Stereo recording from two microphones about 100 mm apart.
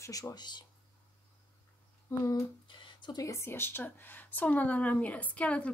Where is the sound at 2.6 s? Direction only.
55° left (ahead or behind).